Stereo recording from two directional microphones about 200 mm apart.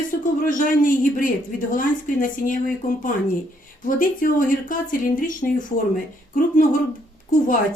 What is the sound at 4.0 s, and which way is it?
Speech, 45° left (ahead or behind).